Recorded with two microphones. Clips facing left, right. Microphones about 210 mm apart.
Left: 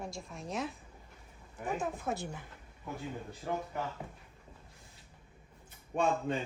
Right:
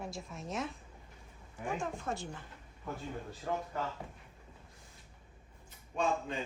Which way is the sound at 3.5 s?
15° left (ahead or behind).